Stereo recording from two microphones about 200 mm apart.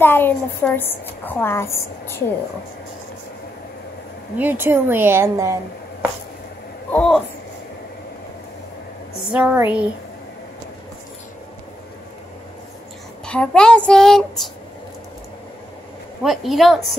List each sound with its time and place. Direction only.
0.0 s a woman's voice: 10° left (ahead or behind)
4.4 s a woman's voice: 10° right (ahead or behind)
6.9 s a sound: 5° left (ahead or behind)
9.3 s a woman's voice: 10° right (ahead or behind)
13.2 s a child's voice: 5° left (ahead or behind)
16.2 s a child's voice: centre (ahead or behind)